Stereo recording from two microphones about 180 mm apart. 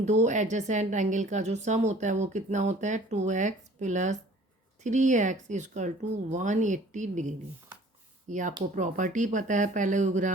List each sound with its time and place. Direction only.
0.0 s a woman's voice: 40° right (ahead or behind)